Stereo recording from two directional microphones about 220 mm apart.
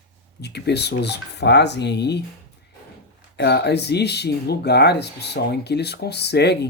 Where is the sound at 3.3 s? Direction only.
50° left (ahead or behind).